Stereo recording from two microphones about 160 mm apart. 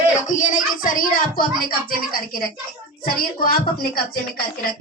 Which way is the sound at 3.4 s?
65° left (ahead or behind).